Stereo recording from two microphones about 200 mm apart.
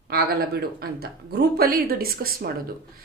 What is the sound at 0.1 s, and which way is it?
Speech, 50° right (ahead or behind).